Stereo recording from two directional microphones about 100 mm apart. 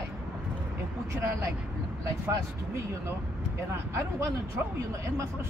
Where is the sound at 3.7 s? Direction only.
30° right (ahead or behind).